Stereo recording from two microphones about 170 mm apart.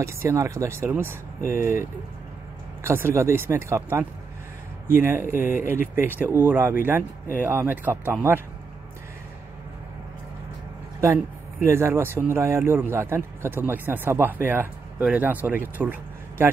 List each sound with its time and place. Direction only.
0.0 s speech: 15° right (ahead or behind)
11.6 s speech: 15° right (ahead or behind)